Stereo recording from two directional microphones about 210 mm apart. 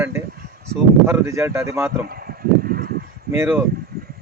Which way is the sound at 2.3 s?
45° right (ahead or behind).